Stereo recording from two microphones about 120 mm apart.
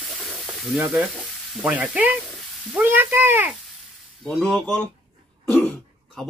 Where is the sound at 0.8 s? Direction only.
10° right (ahead or behind).